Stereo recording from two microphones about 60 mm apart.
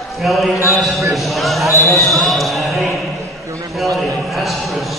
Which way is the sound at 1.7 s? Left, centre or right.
Left.